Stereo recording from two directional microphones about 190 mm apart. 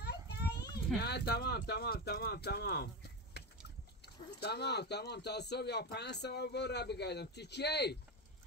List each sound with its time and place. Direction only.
0.0 s children playing: 60° left (ahead or behind)
0.9 s speech: 60° left (ahead or behind)
3.4 s a sound: 60° left (ahead or behind)
4.0 s speech: 60° left (ahead or behind)